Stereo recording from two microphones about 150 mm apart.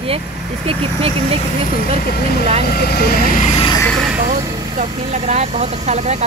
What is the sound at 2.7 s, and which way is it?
Speech, 90° left.